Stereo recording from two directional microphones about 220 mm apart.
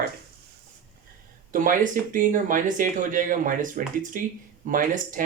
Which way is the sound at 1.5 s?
35° right (ahead or behind).